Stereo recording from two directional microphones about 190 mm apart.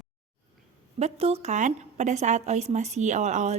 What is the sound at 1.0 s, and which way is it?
A woman's voice, 35° right (ahead or behind).